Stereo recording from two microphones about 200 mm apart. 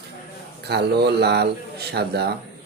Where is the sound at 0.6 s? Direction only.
55° right (ahead or behind).